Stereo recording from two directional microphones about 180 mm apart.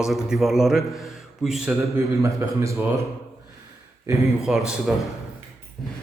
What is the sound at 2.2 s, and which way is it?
Speech, 15° right (ahead or behind).